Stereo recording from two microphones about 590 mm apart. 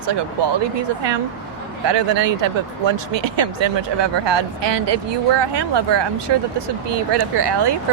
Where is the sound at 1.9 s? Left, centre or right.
Right.